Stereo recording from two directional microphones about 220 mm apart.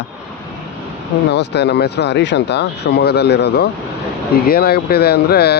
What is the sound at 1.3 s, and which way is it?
Speech, 50° left (ahead or behind).